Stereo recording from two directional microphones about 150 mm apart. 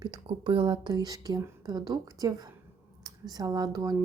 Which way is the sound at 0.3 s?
35° right (ahead or behind).